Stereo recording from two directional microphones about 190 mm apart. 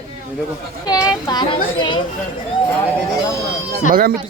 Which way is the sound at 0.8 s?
20° left (ahead or behind).